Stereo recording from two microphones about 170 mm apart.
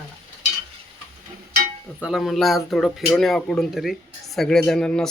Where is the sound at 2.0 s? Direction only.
Centre (ahead or behind).